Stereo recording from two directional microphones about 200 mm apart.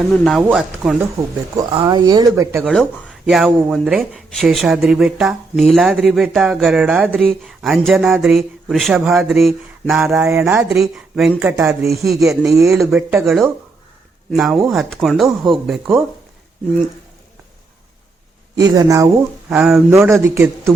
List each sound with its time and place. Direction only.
0.1 s speech: centre (ahead or behind)
1.5 s speech: 20° right (ahead or behind)
2.6 s speech: centre (ahead or behind)
10.2 s speech: 15° right (ahead or behind)
11.5 s speech: 15° right (ahead or behind)
11.8 s speech: centre (ahead or behind)
12.5 s speech: 15° right (ahead or behind)
12.8 s speech: 5° right (ahead or behind)
18.5 s speech: 20° right (ahead or behind)
19.5 s speech: 5° right (ahead or behind)